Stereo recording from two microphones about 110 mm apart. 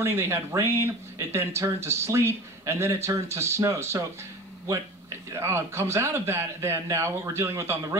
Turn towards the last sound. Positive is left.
turn(degrees=-25)  # may be behind; listen again after turning